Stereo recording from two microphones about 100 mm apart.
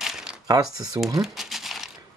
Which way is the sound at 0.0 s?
5° right (ahead or behind).